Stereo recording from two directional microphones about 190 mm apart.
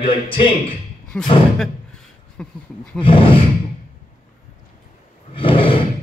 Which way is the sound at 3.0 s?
30° left (ahead or behind).